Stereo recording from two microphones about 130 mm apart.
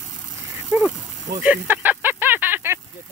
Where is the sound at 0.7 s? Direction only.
15° right (ahead or behind).